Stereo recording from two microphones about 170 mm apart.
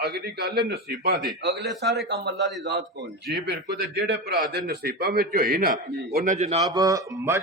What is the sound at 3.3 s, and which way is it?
A man's voice, 70° right (ahead or behind).